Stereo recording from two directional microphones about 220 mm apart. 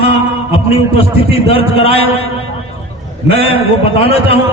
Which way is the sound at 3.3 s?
25° left (ahead or behind).